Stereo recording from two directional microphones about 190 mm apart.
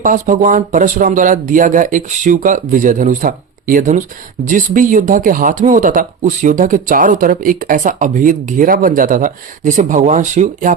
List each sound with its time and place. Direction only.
0.0 s speech: 45° right (ahead or behind)